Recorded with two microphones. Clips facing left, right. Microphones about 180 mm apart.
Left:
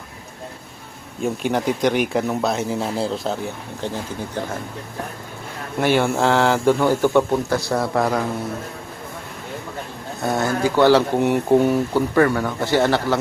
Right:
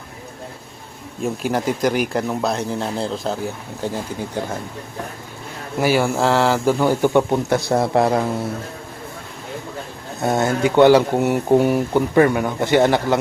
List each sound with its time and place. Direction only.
1.2 s speech: centre (ahead or behind)
3.8 s speech: 10° right (ahead or behind)
5.8 s speech: 5° right (ahead or behind); by 8.2 s 25° right (ahead or behind)
10.2 s speech: 25° right (ahead or behind)
11.2 s speech: 5° right (ahead or behind)